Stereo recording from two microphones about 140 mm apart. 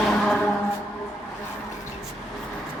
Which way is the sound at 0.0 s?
5° left (ahead or behind).